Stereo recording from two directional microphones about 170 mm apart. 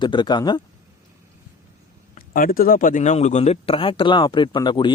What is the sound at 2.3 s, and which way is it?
Speech, 55° left (ahead or behind).